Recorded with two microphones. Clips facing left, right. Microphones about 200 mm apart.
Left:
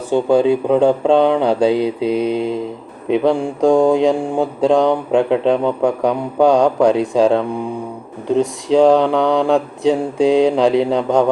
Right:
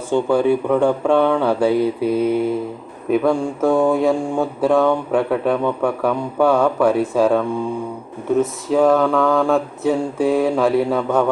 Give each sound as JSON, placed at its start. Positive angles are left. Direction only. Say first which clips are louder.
{"t": 0.1, "sound": "speech", "louder": "left 3 dB", "side_deg": 20}